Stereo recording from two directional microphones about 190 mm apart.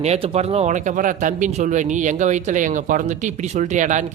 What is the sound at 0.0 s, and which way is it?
Speech, 35° right (ahead or behind).